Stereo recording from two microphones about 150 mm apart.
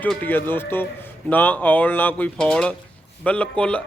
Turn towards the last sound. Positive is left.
turn(degrees=10)  # may be behind; listen again after turning